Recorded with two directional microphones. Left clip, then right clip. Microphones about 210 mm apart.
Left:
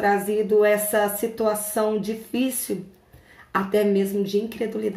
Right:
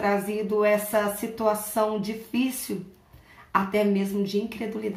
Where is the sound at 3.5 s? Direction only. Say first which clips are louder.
Left 3 dB; centre (ahead or behind).